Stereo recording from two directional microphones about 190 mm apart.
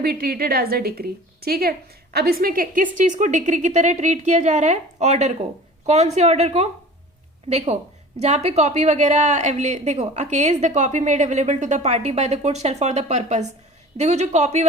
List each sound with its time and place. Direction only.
0.0 s a woman's voice: 55° right (ahead or behind); by 14.7 s 35° right (ahead or behind)